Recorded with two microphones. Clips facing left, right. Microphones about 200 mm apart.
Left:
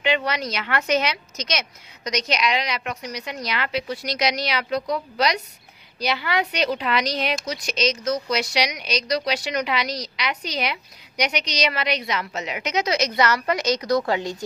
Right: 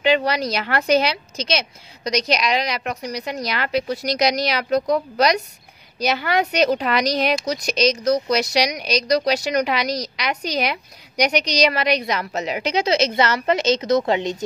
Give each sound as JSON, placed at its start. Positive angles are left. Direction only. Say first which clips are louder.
{"t": 0.0, "sound": "speech", "louder": "right 5 dB", "side_deg": -35}